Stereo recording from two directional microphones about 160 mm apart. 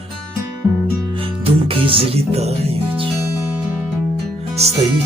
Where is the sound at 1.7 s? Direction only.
35° right (ahead or behind).